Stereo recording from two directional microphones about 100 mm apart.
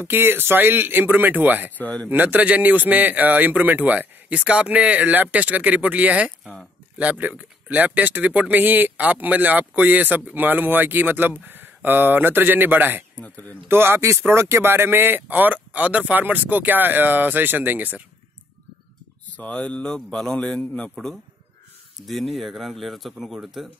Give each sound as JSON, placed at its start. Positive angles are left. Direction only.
{"t": 0.0, "sound": "speech", "side_deg": -20}
{"t": 1.8, "sound": "a man's voice", "side_deg": 15}
{"t": 2.0, "sound": "speech", "side_deg": -15}
{"t": 6.4, "sound": "speech", "side_deg": 0}
{"t": 7.0, "sound": "speech", "side_deg": -15}
{"t": 13.2, "sound": "a man's voice", "side_deg": 15}
{"t": 13.7, "sound": "speech", "side_deg": -25}
{"t": 19.3, "sound": "a man's voice", "side_deg": 15}